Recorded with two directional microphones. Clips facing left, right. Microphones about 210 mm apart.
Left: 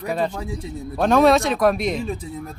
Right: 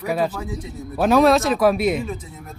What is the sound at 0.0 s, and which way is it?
Speech, 5° right (ahead or behind).